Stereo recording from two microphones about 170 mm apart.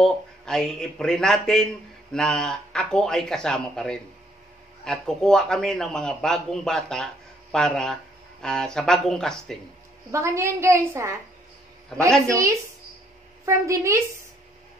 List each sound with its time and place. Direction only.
0.0 s a man's voice: 5° left (ahead or behind)
10.1 s a woman's voice: 15° right (ahead or behind)
12.3 s a woman's voice: 20° right (ahead or behind)